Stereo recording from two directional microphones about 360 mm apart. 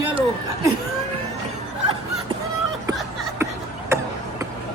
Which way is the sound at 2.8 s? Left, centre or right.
Centre.